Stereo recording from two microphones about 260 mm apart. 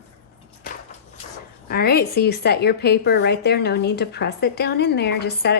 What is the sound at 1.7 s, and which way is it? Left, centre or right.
A woman's voice, left.